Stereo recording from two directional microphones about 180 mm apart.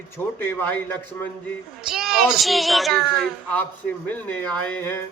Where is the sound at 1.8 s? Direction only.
5° right (ahead or behind).